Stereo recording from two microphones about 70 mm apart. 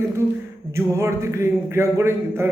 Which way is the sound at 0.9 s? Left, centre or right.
Right.